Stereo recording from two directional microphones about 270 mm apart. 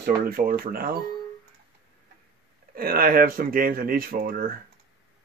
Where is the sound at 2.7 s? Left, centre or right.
Right.